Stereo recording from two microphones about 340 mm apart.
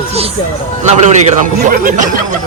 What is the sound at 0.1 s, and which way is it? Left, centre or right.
Speech, centre.